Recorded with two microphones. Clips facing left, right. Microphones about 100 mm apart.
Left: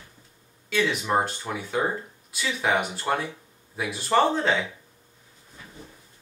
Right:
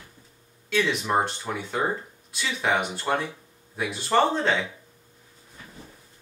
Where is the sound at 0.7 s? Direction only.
Centre (ahead or behind).